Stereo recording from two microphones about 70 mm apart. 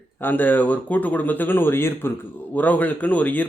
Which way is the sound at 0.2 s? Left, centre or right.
Left.